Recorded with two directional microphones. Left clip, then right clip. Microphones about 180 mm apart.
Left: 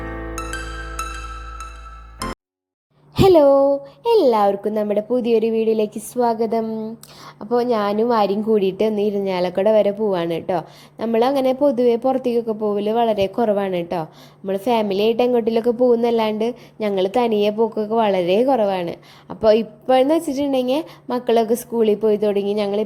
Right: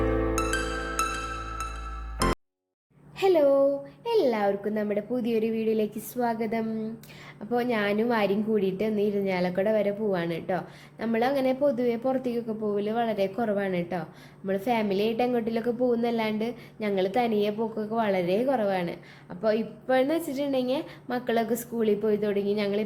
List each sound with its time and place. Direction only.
0.0 s music: centre (ahead or behind)
3.2 s a woman's voice: 45° left (ahead or behind)